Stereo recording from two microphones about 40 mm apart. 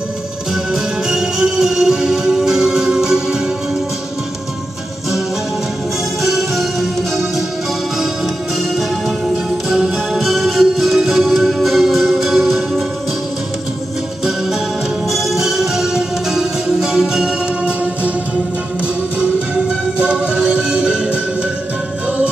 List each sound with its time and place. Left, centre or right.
1.0 s music: centre
6.2 s music: centre
10.1 s music: centre
15.0 s music: centre
20.0 s music: right